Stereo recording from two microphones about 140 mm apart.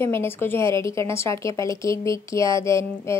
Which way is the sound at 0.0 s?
15° left (ahead or behind).